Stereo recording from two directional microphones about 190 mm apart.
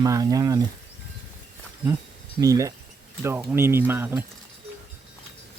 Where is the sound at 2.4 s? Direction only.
15° right (ahead or behind).